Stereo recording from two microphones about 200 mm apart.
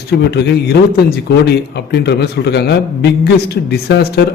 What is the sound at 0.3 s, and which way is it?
A man's voice, 55° left (ahead or behind).